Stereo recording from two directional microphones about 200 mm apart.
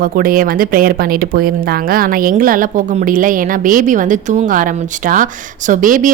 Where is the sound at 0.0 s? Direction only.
45° right (ahead or behind).